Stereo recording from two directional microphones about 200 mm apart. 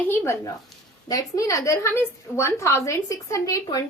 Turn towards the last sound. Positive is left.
turn(degrees=15)  # may be behind; listen again after turning